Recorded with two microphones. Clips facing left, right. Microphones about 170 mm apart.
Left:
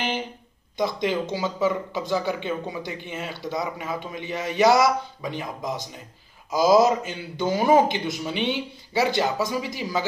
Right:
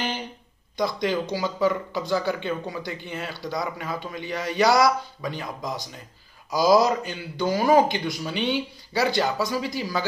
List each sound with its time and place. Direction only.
0.7 s speech: 20° left (ahead or behind)